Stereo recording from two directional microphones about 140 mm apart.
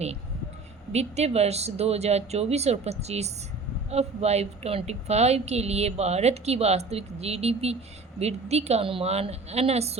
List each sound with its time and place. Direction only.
0.9 s a woman's voice: 50° right (ahead or behind)